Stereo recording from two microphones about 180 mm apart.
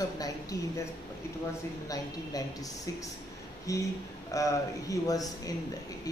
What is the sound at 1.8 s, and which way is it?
Speech, 20° left (ahead or behind).